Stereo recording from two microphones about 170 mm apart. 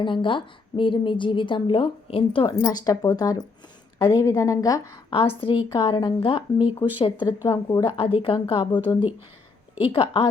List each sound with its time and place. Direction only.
0.0 s a woman's voice: 30° left (ahead or behind)
7.9 s speech: 35° left (ahead or behind)
9.8 s speech: 35° left (ahead or behind)